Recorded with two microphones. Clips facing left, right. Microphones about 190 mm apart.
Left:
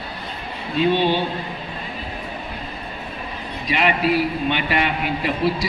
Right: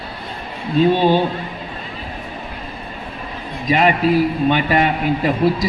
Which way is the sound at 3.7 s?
40° right (ahead or behind).